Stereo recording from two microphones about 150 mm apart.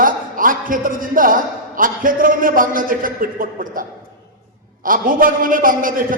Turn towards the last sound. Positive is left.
turn(degrees=-65)  # may be behind; listen again after turning